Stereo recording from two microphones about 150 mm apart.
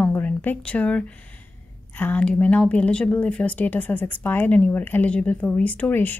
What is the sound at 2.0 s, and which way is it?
A woman's voice, 10° left (ahead or behind).